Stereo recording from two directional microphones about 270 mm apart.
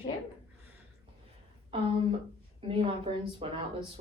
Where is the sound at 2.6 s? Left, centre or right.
Centre.